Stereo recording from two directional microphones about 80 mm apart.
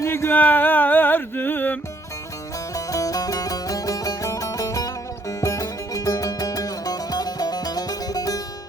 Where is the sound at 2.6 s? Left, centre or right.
Left.